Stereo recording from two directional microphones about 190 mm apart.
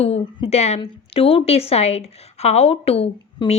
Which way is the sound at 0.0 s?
30° left (ahead or behind).